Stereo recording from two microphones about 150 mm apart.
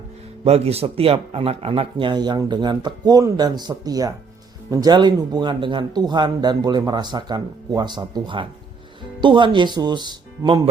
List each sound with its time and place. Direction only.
0.4 s a man's voice: 45° right (ahead or behind)